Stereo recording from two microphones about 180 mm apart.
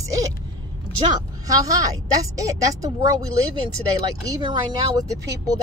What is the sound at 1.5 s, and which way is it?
Speech, 20° right (ahead or behind).